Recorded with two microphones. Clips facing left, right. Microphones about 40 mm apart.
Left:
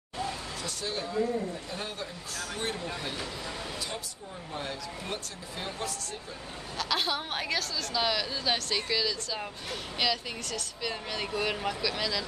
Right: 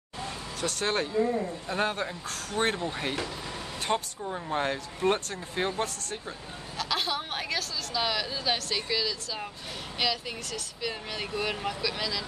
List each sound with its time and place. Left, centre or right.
0.6 s speech: right
1.2 s a man's voice: right
1.7 s speech: right
6.8 s a woman's voice: centre